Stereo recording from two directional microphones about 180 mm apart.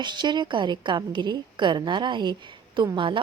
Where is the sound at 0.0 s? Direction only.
25° right (ahead or behind).